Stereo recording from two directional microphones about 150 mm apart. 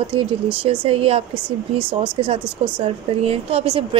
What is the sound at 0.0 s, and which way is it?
Speech, 35° right (ahead or behind).